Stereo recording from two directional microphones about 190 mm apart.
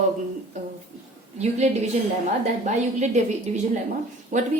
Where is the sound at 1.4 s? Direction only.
35° right (ahead or behind).